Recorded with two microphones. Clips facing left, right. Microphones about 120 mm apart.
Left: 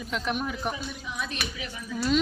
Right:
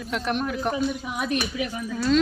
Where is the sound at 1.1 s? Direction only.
50° right (ahead or behind).